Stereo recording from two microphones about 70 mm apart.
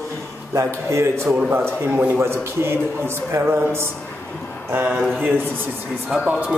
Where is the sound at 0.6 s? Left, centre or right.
Right.